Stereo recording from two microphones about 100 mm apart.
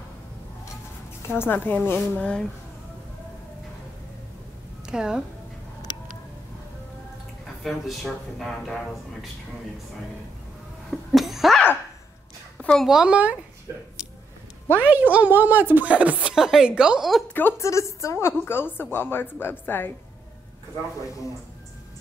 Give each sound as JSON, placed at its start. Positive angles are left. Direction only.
{"t": 1.2, "sound": "a woman's voice", "side_deg": 25}
{"t": 4.8, "sound": "a woman's voice", "side_deg": -5}
{"t": 7.6, "sound": "speech", "side_deg": 0}
{"t": 10.9, "sound": "speech", "side_deg": 0}
{"t": 12.5, "sound": "a sound", "side_deg": 10}
{"t": 12.8, "sound": "speech", "side_deg": -10}
{"t": 14.8, "sound": "speech", "side_deg": -15}
{"t": 17.3, "sound": "a woman's voice", "side_deg": 20}